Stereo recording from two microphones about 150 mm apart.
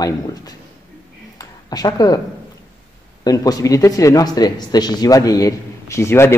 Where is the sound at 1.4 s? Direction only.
25° left (ahead or behind).